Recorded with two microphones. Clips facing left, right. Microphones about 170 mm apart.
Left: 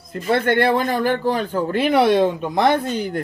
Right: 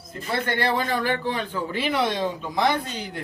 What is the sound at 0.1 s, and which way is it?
A man's voice, 60° left (ahead or behind).